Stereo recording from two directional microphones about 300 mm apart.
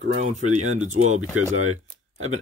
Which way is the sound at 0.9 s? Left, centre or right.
Right.